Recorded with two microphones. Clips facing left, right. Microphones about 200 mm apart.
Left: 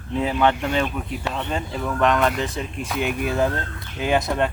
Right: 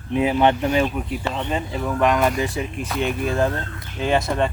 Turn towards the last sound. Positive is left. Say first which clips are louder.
# right 1 dB
turn(degrees=0)  # may be behind; listen again after turning